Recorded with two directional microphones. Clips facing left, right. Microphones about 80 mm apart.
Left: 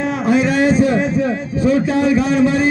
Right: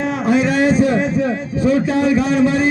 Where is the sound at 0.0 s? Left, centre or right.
Right.